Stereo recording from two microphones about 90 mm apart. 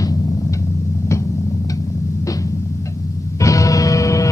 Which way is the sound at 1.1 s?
30° left (ahead or behind).